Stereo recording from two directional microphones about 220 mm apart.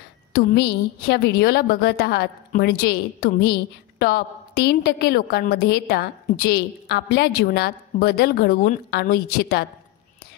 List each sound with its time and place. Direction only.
0.3 s a woman's voice: 45° left (ahead or behind)